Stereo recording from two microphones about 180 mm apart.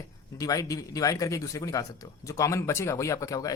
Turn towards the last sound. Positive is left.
turn(degrees=20)  # may be behind; listen again after turning